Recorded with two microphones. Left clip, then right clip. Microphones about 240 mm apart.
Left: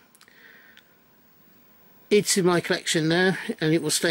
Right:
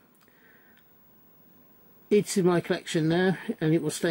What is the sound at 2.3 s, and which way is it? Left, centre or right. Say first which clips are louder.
Speech: left 3 dB; centre.